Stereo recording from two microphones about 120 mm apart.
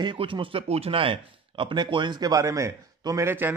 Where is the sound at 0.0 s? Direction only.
45° right (ahead or behind).